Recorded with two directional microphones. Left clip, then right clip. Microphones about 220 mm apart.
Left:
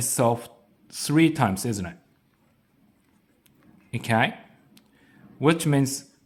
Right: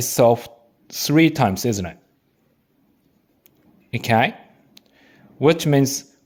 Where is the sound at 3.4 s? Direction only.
25° right (ahead or behind).